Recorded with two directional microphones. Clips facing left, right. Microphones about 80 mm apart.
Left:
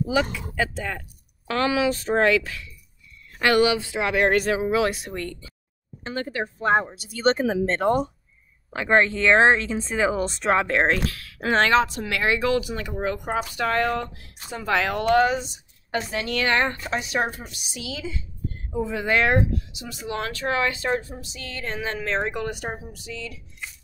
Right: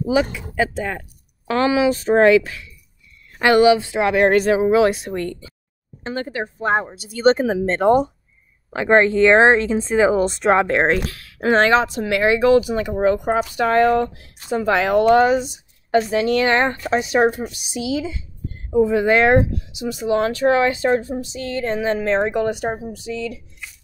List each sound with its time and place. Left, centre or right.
0.1 s speech: right